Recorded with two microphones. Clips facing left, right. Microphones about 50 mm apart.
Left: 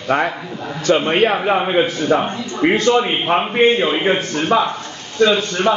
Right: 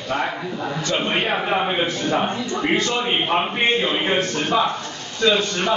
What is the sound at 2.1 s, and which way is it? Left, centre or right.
A man's voice, left.